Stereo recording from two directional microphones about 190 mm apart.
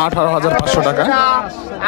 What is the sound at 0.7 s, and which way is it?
Speech, 50° left (ahead or behind).